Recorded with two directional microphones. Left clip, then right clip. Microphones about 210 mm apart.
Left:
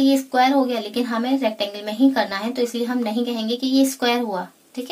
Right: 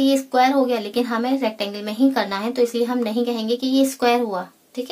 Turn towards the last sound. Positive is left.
turn(degrees=-10)  # may be behind; listen again after turning